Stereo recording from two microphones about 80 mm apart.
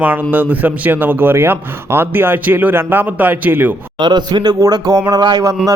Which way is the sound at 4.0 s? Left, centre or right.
Right.